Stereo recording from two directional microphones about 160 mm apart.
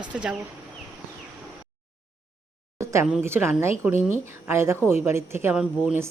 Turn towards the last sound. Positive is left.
turn(degrees=-5)  # may be behind; listen again after turning